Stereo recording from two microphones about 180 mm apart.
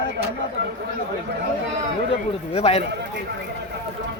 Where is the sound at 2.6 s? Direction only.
35° left (ahead or behind).